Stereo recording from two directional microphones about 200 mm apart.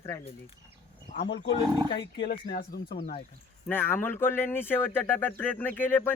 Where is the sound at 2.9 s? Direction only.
40° left (ahead or behind).